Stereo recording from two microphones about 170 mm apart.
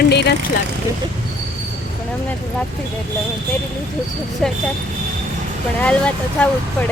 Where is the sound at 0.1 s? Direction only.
75° left (ahead or behind).